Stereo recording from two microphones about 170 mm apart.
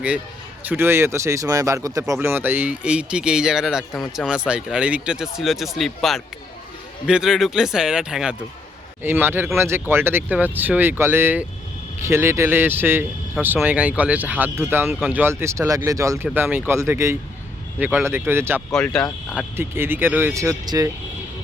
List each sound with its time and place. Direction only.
0.7 s speech: 15° right (ahead or behind)
18.7 s speech: 5° left (ahead or behind)
19.5 s speech: 15° right (ahead or behind)